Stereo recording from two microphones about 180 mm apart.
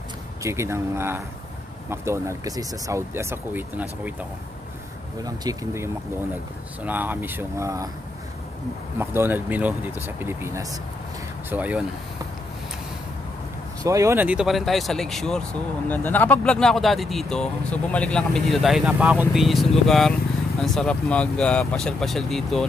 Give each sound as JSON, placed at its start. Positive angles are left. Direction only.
{"t": 0.4, "sound": "speech", "side_deg": -15}
{"t": 5.2, "sound": "speech", "side_deg": -20}
{"t": 8.9, "sound": "speech", "side_deg": -10}
{"t": 13.8, "sound": "speech", "side_deg": -15}